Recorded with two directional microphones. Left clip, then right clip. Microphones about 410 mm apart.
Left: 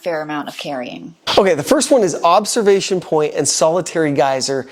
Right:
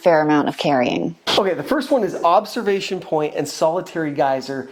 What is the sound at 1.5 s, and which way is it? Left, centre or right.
Speech, left.